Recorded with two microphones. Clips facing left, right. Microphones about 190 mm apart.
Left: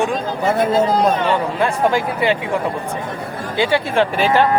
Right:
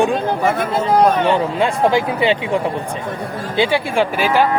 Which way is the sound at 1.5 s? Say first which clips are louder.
Right 2 dB; 15° right (ahead or behind).